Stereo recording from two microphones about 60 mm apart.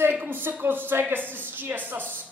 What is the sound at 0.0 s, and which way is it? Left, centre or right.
A woman's voice, right.